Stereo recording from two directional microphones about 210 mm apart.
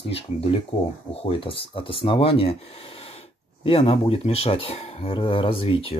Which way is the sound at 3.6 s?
25° left (ahead or behind).